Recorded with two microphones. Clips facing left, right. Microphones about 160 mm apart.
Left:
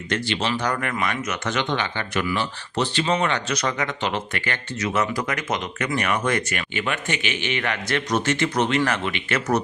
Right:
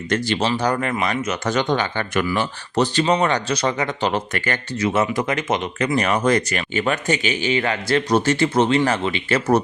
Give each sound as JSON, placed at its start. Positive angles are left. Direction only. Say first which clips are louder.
{"t": 0.1, "sound": "speech", "louder": "right 4 dB", "side_deg": -40}
{"t": 4.8, "sound": "speech", "louder": "right 4 dB", "side_deg": -25}